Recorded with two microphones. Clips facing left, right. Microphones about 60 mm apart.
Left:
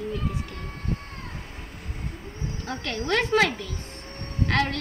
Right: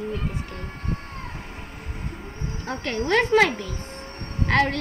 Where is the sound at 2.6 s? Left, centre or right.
Right.